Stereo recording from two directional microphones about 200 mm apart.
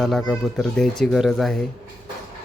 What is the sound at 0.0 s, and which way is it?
Speech, centre (ahead or behind).